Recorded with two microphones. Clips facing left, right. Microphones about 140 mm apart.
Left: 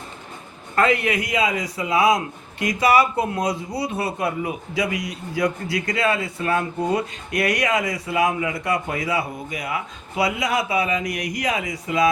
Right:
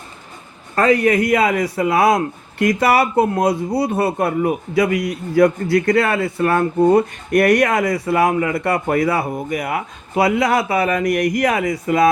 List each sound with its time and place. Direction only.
0.8 s a man's voice: 40° right (ahead or behind)